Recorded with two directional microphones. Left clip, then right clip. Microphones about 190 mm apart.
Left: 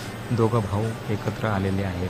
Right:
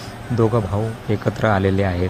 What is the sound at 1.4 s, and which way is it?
Speech, 30° right (ahead or behind).